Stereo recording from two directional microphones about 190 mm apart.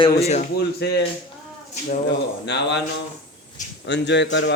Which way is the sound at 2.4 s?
65° left (ahead or behind).